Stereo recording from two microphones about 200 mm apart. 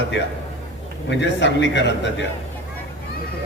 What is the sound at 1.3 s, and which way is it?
Speech, 65° left (ahead or behind).